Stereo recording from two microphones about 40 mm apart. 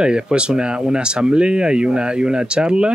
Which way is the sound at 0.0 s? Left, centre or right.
Right.